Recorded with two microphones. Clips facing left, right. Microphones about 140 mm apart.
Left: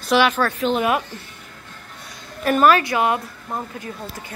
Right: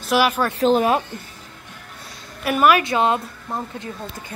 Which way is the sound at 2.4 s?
10° right (ahead or behind).